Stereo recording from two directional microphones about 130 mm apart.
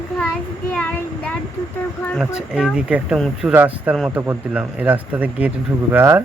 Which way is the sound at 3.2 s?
5° left (ahead or behind).